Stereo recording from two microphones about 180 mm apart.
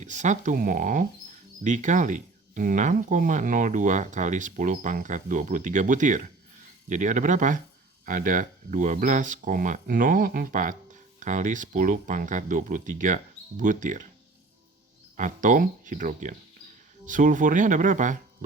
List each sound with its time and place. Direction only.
0.0 s speech: 45° right (ahead or behind)
15.1 s speech: 45° right (ahead or behind)